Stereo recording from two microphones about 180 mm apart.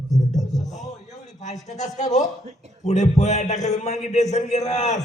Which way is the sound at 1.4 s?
40° left (ahead or behind).